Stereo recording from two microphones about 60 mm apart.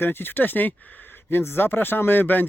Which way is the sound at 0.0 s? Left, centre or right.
Left.